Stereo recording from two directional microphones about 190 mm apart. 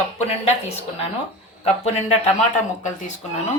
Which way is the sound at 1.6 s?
35° left (ahead or behind).